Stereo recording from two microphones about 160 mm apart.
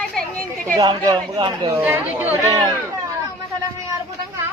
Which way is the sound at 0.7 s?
25° right (ahead or behind).